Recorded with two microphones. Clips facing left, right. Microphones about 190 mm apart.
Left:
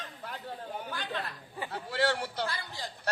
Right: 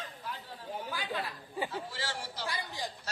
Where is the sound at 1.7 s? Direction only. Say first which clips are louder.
Left 9 dB; 60° left (ahead or behind).